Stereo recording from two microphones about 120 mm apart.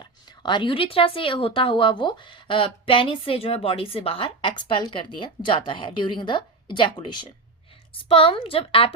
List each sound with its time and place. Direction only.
0.0 s speech: 40° left (ahead or behind)